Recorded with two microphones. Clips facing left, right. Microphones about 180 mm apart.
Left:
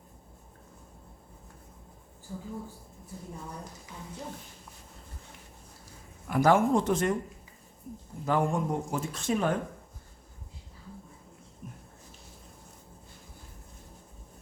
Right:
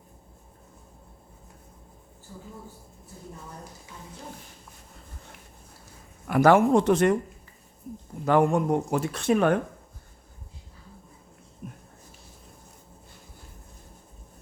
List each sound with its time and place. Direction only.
6.2 s speech: 70° right (ahead or behind)
8.2 s speech: 70° right (ahead or behind)
11.6 s a sound: 65° right (ahead or behind)